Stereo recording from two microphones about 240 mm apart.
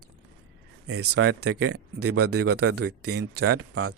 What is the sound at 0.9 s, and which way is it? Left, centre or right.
Speech, right.